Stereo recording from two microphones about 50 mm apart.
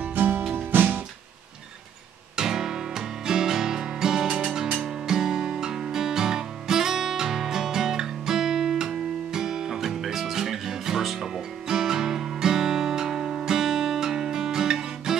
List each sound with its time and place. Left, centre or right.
0.1 s music: right
2.3 s music: centre